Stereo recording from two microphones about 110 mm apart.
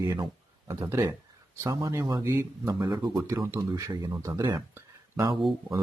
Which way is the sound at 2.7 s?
40° right (ahead or behind).